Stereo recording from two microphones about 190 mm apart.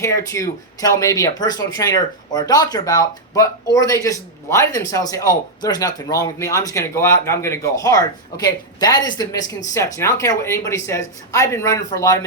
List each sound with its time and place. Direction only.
0.0 s speech: 15° left (ahead or behind)